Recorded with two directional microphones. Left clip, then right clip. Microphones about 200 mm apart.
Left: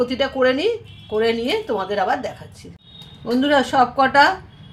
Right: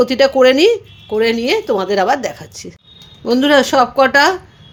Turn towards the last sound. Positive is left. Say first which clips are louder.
# right 3 dB
turn(degrees=-50)  # may be behind; listen again after turning